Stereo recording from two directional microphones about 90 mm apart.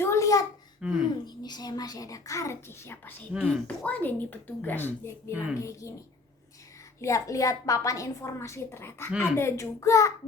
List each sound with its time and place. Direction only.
0.0 s a sound: 35° left (ahead or behind)
0.8 s speech: 5° right (ahead or behind)
1.2 s a woman's voice: 50° left (ahead or behind); by 3.2 s 25° left (ahead or behind)
3.4 s a woman's voice: 10° left (ahead or behind)
5.5 s a woman's voice: 35° left (ahead or behind)
7.0 s a woman's voice: 35° left (ahead or behind)